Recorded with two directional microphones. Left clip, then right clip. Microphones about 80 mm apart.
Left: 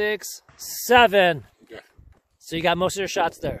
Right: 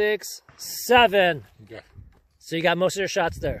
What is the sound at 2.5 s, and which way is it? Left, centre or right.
Speech, left.